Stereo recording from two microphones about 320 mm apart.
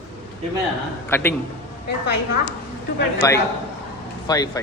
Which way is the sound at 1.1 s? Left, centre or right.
Centre.